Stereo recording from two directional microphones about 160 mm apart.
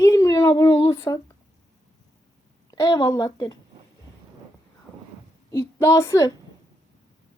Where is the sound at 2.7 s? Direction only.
20° left (ahead or behind).